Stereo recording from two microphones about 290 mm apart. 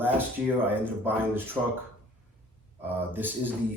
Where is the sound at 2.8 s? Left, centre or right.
Centre.